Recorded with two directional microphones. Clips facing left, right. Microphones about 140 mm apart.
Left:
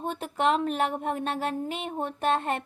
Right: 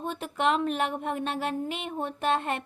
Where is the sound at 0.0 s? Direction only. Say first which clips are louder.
Left 1 dB; 40° left (ahead or behind).